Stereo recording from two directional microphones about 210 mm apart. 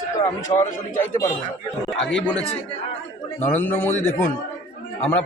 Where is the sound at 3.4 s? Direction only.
10° left (ahead or behind).